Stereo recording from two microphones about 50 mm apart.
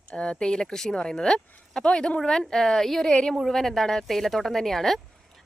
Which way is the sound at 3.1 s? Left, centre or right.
Centre.